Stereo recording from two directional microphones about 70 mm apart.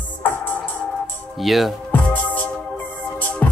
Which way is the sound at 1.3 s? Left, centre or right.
Centre.